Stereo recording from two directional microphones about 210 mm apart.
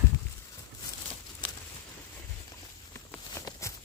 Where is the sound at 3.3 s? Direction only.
15° left (ahead or behind).